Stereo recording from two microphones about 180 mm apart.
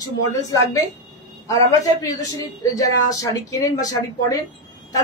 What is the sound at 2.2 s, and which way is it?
Speech, 20° left (ahead or behind).